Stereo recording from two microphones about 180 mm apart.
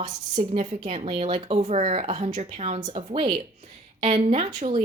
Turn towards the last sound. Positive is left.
turn(degrees=-35)  # may be behind; listen again after turning